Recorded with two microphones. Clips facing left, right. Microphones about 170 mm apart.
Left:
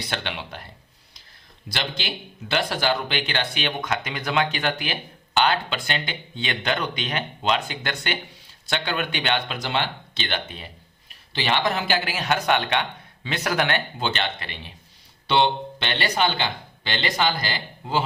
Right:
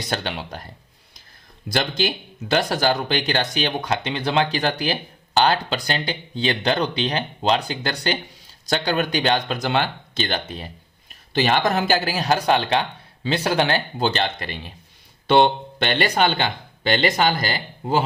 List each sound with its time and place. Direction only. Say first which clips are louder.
0.0 s speech: right 4 dB; 40° right (ahead or behind)
1.7 s speech: right 7 dB; 45° right (ahead or behind)